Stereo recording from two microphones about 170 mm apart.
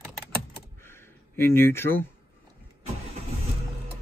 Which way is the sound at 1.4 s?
15° left (ahead or behind).